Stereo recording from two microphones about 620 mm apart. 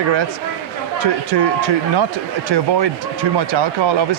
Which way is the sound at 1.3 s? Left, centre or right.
Right.